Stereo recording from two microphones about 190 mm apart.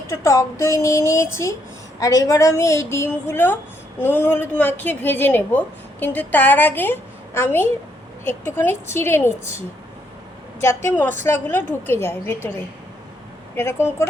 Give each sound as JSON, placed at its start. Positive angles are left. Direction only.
{"t": 0.1, "sound": "a woman's voice", "side_deg": 15}
{"t": 10.8, "sound": "a woman's voice", "side_deg": 10}
{"t": 13.6, "sound": "a woman's voice", "side_deg": 15}